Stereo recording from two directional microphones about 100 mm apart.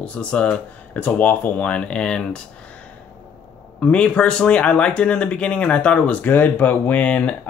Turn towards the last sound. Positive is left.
turn(degrees=15)  # may be behind; listen again after turning